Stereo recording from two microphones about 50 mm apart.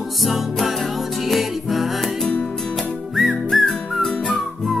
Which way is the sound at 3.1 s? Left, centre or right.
Centre.